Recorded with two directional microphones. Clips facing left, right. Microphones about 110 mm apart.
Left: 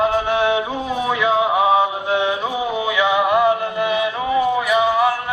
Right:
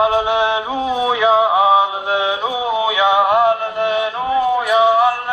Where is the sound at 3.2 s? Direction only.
45° right (ahead or behind).